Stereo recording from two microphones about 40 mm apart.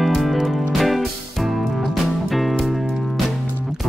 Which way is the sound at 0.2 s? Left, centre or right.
Centre.